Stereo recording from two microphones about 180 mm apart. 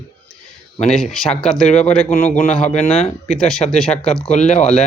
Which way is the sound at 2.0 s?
40° left (ahead or behind).